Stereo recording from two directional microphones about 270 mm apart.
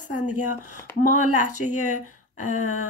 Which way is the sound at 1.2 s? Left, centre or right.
Left.